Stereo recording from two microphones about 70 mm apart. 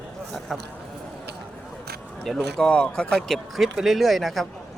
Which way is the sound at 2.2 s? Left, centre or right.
Centre.